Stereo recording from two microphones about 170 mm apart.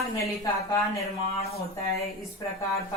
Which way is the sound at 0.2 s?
20° left (ahead or behind).